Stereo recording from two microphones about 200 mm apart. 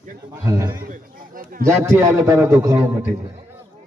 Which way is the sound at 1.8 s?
15° right (ahead or behind).